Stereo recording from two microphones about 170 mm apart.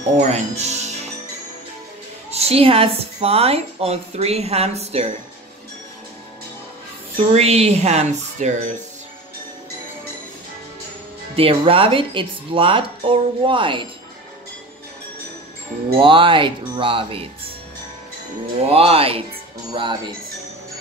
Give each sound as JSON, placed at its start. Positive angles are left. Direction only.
{"t": 0.2, "sound": "speech", "side_deg": -40}
{"t": 2.3, "sound": "a woman's voice", "side_deg": -35}
{"t": 7.2, "sound": "a woman's voice", "side_deg": -40}
{"t": 11.3, "sound": "a woman's voice", "side_deg": -35}
{"t": 16.0, "sound": "speech", "side_deg": -30}
{"t": 18.6, "sound": "a woman's voice", "side_deg": -35}